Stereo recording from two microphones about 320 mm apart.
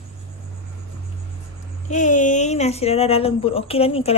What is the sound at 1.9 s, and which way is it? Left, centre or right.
Speech, left.